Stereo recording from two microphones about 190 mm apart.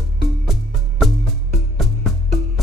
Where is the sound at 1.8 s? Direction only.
Centre (ahead or behind).